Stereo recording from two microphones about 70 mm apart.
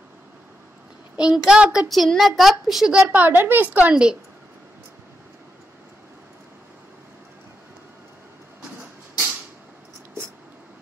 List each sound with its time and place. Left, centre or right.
1.1 s a child's voice: centre
1.5 s child singing: centre
1.9 s a woman's voice: centre
3.2 s a woman's voice: right; by 4.2 s centre